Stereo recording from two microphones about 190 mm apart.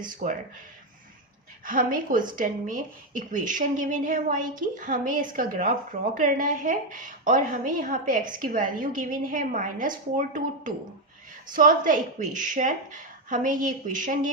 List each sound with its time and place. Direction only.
0.0 s a woman's voice: 45° right (ahead or behind)
1.6 s a woman's voice: 45° right (ahead or behind)